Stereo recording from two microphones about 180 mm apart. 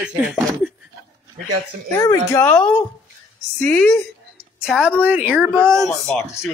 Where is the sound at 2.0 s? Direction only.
15° left (ahead or behind); by 5.9 s 15° right (ahead or behind).